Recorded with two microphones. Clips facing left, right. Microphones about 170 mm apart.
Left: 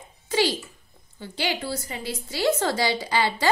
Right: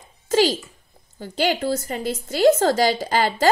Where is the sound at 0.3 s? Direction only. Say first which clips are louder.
Right 5 dB; 45° right (ahead or behind).